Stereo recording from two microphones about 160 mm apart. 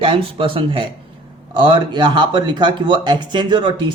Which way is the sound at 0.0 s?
30° right (ahead or behind).